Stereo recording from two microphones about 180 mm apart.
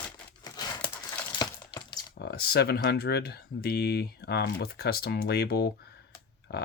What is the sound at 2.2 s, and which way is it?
Speech, 65° left (ahead or behind).